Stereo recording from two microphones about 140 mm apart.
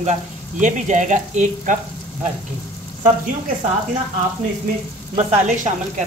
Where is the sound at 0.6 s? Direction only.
65° right (ahead or behind).